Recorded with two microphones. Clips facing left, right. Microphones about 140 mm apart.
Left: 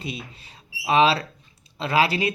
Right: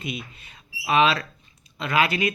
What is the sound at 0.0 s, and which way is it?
Speech, 35° left (ahead or behind).